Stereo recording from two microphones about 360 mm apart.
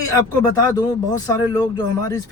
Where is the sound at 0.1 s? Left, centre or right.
Centre.